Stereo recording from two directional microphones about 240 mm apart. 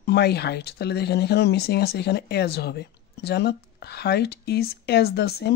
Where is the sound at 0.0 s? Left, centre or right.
Left.